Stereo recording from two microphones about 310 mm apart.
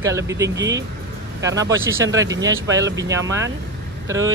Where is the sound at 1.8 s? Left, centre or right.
Centre.